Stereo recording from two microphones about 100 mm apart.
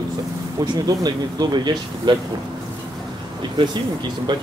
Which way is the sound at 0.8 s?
45° right (ahead or behind).